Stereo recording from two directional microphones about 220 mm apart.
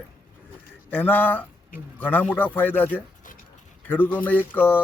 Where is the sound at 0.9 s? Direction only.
10° left (ahead or behind).